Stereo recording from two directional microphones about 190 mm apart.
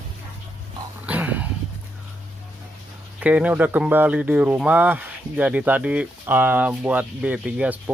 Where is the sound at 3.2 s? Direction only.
10° right (ahead or behind).